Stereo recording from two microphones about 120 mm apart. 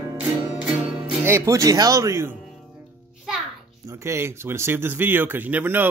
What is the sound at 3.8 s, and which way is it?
Speech, 25° right (ahead or behind).